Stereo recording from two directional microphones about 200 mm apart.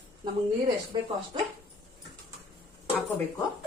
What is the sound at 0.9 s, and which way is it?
Speech, 20° right (ahead or behind).